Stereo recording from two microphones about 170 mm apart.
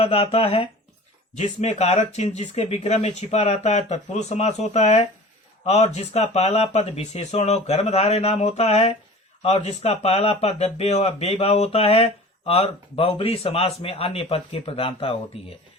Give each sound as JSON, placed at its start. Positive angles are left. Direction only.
{"t": 0.0, "sound": "speech", "side_deg": 35}